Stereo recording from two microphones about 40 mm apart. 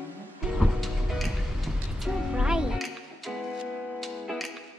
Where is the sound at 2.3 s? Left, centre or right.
Right.